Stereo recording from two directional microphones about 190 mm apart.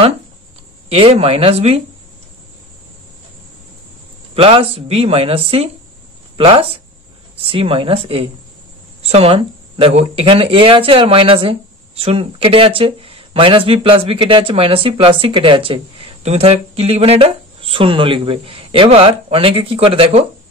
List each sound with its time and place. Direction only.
0.8 s speech: 30° right (ahead or behind)
4.4 s speech: 30° right (ahead or behind)